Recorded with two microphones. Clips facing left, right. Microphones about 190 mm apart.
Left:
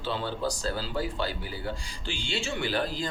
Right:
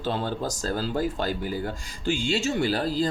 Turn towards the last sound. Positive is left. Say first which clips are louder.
# right 5 dB
turn(degrees=-40)  # may be behind; listen again after turning